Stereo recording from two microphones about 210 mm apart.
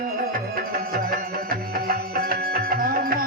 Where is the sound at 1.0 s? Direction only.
45° right (ahead or behind).